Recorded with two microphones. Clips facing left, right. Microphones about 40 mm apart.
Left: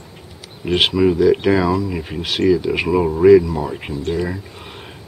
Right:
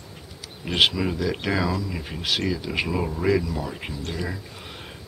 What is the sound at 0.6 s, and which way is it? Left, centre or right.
Speech, centre.